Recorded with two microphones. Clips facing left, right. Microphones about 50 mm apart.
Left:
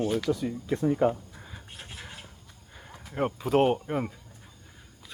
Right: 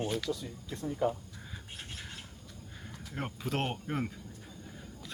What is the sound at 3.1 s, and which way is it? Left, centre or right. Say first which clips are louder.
Speech: left 11 dB; centre.